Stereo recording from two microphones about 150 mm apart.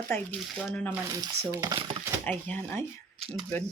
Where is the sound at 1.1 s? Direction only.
25° right (ahead or behind).